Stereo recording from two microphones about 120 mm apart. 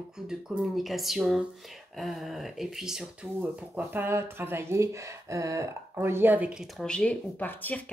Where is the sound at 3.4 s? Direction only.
15° right (ahead or behind).